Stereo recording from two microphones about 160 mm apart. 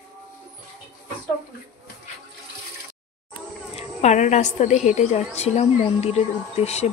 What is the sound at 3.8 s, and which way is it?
A woman's voice, 45° left (ahead or behind).